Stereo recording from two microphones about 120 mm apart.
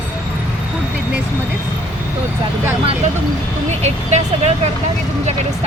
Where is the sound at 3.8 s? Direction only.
65° right (ahead or behind).